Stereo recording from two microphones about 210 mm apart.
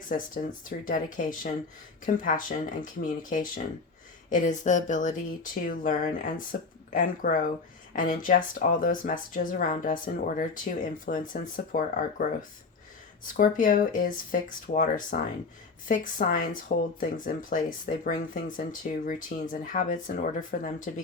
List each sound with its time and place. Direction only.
0.1 s speech: 35° left (ahead or behind)